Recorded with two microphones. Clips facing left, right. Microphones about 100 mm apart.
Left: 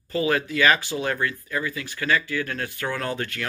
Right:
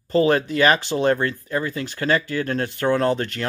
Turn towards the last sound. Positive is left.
turn(degrees=-30)  # may be behind; listen again after turning